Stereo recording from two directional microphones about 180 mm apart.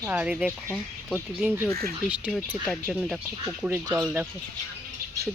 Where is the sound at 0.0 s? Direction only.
5° right (ahead or behind).